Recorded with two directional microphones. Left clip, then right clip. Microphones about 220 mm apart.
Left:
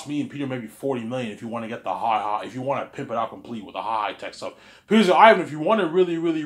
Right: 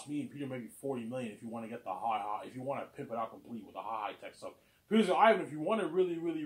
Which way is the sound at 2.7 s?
25° left (ahead or behind).